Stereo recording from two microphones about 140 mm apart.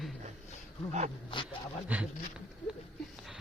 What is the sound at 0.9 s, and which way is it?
Speech, 55° right (ahead or behind).